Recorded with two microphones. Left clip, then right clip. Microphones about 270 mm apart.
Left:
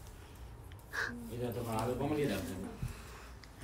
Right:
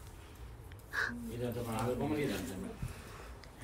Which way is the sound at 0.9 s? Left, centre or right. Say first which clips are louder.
Right 2 dB; centre.